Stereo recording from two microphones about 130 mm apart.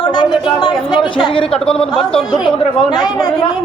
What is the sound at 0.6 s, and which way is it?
Speech, 35° left (ahead or behind).